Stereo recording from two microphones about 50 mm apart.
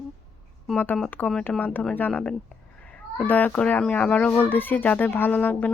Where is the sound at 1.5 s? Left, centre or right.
Left.